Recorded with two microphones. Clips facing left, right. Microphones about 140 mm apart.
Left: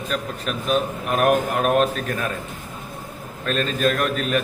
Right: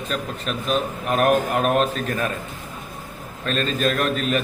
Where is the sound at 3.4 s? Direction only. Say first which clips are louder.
Left 1 dB; 5° left (ahead or behind).